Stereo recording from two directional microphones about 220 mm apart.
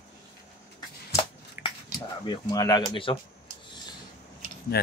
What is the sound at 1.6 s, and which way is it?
Speech, 20° left (ahead or behind).